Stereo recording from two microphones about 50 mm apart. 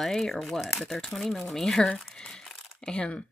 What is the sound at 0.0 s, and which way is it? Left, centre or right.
Speech, centre.